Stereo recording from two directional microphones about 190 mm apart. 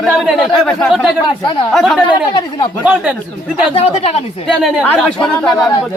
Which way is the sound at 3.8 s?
35° left (ahead or behind).